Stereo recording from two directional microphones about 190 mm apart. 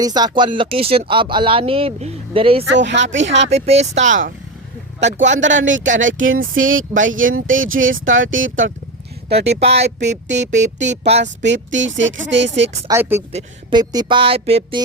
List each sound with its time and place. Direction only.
0.0 s speech: 20° right (ahead or behind)
2.7 s speech: 70° right (ahead or behind)
3.5 s speech: 35° right (ahead or behind)
5.2 s speech: 75° right (ahead or behind); by 8.7 s 90° right
9.3 s speech: 60° right (ahead or behind)
12.9 s speech: 15° right (ahead or behind)
13.3 s speech: 25° right (ahead or behind)